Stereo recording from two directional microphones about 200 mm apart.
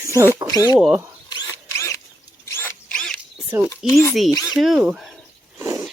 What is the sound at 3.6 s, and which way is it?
Speech, 15° left (ahead or behind).